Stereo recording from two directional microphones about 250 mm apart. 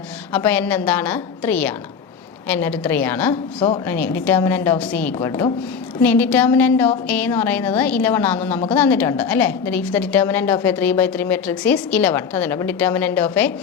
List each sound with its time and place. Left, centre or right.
0.3 s a woman's voice: centre